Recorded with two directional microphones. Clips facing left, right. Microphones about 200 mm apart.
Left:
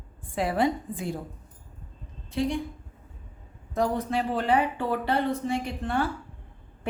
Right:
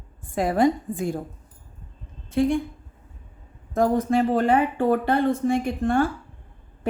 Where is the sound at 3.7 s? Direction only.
45° right (ahead or behind).